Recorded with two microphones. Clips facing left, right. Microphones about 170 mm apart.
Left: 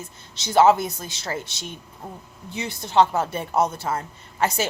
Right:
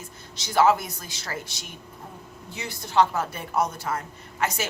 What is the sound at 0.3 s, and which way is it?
A woman's voice, 25° left (ahead or behind).